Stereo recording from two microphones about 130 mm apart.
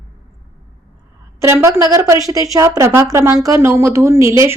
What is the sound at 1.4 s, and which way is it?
A woman's voice, 20° right (ahead or behind).